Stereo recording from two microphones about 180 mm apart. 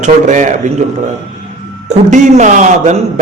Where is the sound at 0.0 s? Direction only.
40° right (ahead or behind).